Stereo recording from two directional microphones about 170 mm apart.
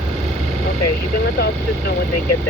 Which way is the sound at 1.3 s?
70° left (ahead or behind).